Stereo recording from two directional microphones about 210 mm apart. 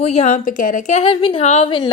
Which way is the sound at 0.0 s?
30° left (ahead or behind).